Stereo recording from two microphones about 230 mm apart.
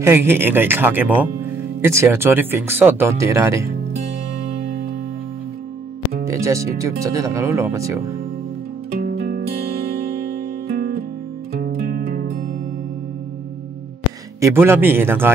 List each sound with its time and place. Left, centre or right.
0.0 s speech: centre
6.2 s speech: centre
9.0 s music: right
11.6 s music: right
14.4 s speech: centre